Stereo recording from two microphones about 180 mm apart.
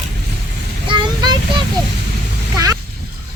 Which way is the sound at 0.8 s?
25° right (ahead or behind).